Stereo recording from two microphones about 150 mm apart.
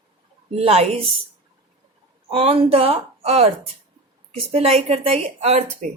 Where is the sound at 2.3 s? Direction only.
40° right (ahead or behind).